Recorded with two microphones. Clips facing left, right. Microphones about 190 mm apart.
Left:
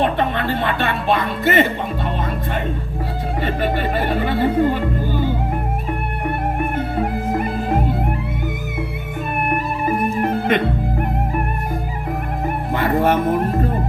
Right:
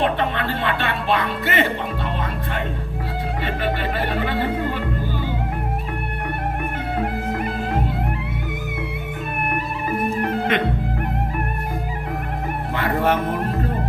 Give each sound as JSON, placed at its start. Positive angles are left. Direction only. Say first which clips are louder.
{"t": 0.0, "sound": "speech", "louder": "left 2 dB", "side_deg": 45}
{"t": 3.4, "sound": "speech", "louder": "left 4 dB", "side_deg": 45}
{"t": 9.8, "sound": "music", "louder": "left 2 dB", "side_deg": 45}
{"t": 12.7, "sound": "music", "louder": "left 3 dB", "side_deg": 45}